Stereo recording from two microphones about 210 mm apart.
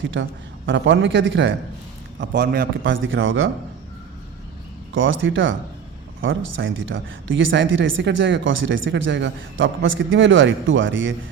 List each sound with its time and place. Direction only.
0.0 s speech: 60° right (ahead or behind)
4.9 s speech: 65° right (ahead or behind)